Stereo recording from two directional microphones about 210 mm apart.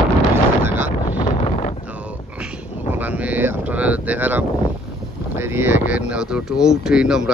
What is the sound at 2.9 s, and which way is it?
Speech, 10° right (ahead or behind).